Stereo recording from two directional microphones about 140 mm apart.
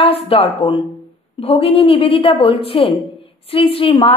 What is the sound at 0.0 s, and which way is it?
A woman's voice, 45° left (ahead or behind).